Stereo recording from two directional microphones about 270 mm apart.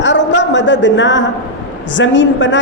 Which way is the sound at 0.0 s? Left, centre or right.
Left.